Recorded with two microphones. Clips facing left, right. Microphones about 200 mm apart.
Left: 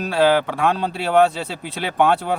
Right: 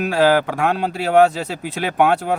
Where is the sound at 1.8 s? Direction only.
50° right (ahead or behind).